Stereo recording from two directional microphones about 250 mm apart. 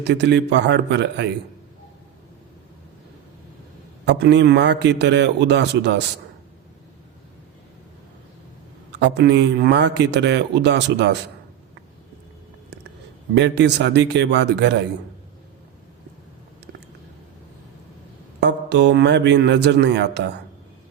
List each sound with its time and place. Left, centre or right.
0.0 s a man's voice: right
4.0 s a man's voice: right
8.9 s a man's voice: right
13.3 s a man's voice: right
18.4 s a man's voice: right